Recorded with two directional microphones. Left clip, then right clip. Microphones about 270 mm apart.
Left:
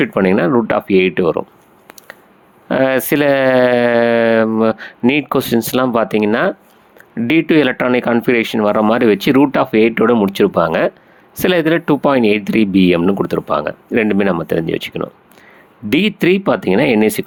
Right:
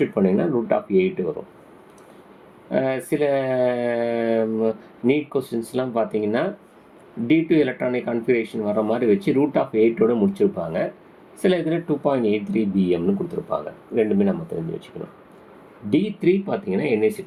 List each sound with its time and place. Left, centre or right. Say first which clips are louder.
0.0 s speech: left 7 dB; left
2.6 s speech: left 9 dB; left
15.9 s speech: left 7 dB; left